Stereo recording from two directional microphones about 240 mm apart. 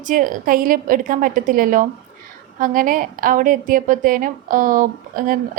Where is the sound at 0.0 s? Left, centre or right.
Right.